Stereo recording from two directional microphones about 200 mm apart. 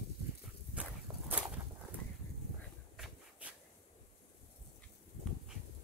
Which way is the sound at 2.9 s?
Centre (ahead or behind).